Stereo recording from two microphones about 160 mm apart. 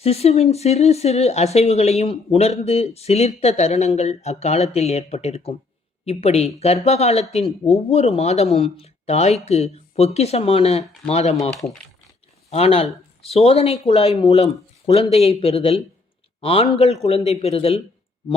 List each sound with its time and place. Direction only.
0.0 s speech: 40° left (ahead or behind)
12.5 s speech: 40° left (ahead or behind)